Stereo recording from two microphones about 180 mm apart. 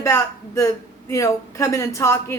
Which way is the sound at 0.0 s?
15° left (ahead or behind).